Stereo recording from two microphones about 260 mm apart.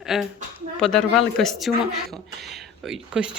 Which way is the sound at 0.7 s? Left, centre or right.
Centre.